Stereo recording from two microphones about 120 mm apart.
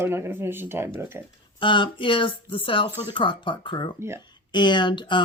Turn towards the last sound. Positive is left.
turn(degrees=40)  # may be behind; listen again after turning